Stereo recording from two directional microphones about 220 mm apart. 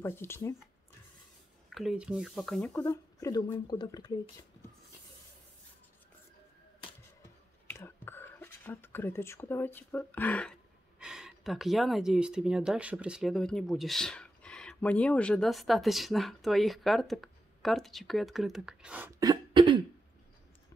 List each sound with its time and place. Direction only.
0.0 s speech: 10° left (ahead or behind)
1.7 s speech: centre (ahead or behind)
2.7 s speech: 15° left (ahead or behind)
7.7 s speech: 10° left (ahead or behind)
11.0 s speech: 5° right (ahead or behind); by 19.8 s 20° right (ahead or behind)